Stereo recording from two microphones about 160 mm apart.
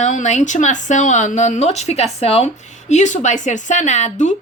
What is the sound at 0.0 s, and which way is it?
A woman's voice, 50° left (ahead or behind).